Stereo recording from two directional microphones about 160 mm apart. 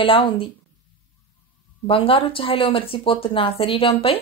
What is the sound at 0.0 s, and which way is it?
Speech, 35° left (ahead or behind).